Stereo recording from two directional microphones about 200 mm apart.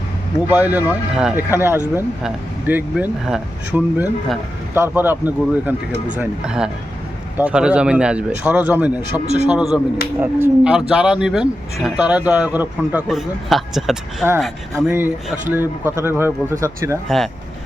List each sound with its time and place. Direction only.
0.5 s speech: 10° right (ahead or behind)
9.2 s speech: 35° right (ahead or behind)
9.5 s speech: 5° right (ahead or behind)
17.1 s speech: centre (ahead or behind)